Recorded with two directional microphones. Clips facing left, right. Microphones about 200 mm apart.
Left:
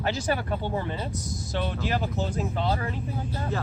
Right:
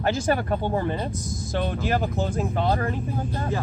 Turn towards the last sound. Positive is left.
turn(degrees=-50)  # may be behind; listen again after turning